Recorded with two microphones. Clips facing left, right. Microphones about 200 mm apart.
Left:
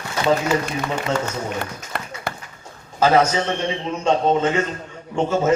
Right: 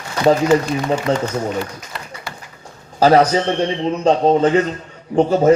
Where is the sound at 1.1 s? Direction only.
30° right (ahead or behind).